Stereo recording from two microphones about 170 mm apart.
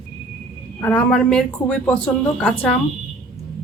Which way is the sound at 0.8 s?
10° left (ahead or behind).